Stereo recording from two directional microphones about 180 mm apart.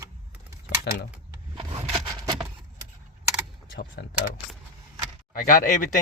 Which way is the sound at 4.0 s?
70° left (ahead or behind).